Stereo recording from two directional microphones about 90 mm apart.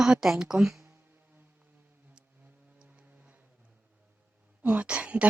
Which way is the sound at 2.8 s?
10° right (ahead or behind).